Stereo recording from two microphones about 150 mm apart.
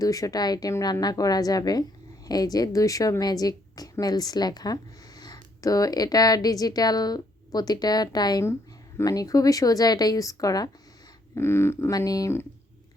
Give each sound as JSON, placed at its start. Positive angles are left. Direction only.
{"t": 0.0, "sound": "a woman's voice", "side_deg": 25}